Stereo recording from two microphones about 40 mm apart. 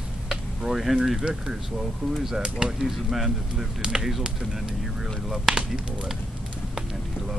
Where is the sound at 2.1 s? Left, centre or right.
Centre.